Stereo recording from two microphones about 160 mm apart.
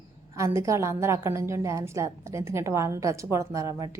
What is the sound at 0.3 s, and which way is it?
A woman's voice, 20° right (ahead or behind).